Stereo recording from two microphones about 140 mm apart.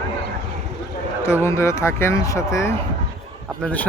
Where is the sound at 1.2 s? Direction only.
20° left (ahead or behind).